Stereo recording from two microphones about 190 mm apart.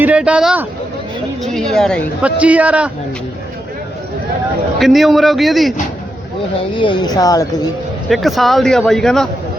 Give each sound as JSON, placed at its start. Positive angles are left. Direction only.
{"t": 0.0, "sound": "a man's voice", "side_deg": -5}
{"t": 2.2, "sound": "speech", "side_deg": -5}
{"t": 4.8, "sound": "a man's voice", "side_deg": 0}
{"t": 6.7, "sound": "a woman's voice", "side_deg": 25}
{"t": 8.1, "sound": "a man's voice", "side_deg": 0}